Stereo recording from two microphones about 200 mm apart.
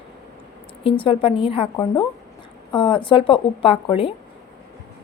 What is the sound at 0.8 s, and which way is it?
A woman's voice, 25° left (ahead or behind).